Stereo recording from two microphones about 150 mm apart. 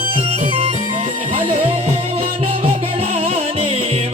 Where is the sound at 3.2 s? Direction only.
45° right (ahead or behind).